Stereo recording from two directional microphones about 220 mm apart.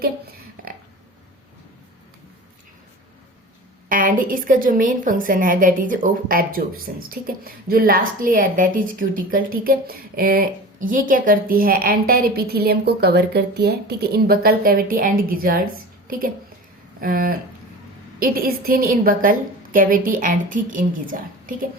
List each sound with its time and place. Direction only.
3.8 s a woman's voice: 40° right (ahead or behind)